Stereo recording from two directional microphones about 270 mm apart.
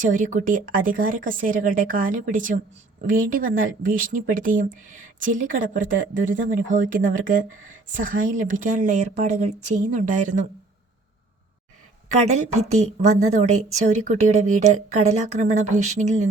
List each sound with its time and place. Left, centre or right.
0.1 s speech: right
12.1 s speech: right